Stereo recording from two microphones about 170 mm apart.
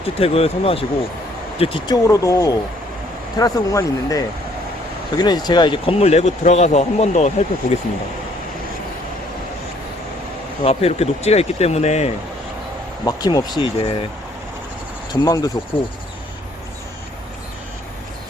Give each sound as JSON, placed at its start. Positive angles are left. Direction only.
{"t": 0.0, "sound": "speech", "side_deg": 35}
{"t": 2.0, "sound": "speech", "side_deg": 20}
{"t": 10.6, "sound": "speech", "side_deg": 35}
{"t": 13.1, "sound": "speech", "side_deg": 25}
{"t": 15.1, "sound": "speech", "side_deg": 25}